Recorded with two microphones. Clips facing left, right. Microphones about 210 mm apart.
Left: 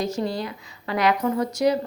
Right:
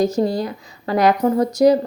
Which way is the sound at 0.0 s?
40° right (ahead or behind).